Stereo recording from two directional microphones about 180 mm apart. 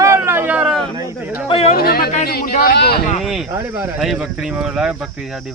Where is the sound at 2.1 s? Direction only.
55° left (ahead or behind).